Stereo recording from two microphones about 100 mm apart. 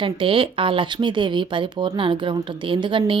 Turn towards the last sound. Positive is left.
turn(degrees=-55)  # may be behind; listen again after turning